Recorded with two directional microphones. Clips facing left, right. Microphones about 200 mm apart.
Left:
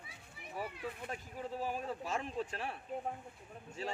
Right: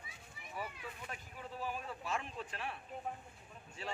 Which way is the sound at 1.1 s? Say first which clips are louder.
Left 6 dB; 35° left (ahead or behind).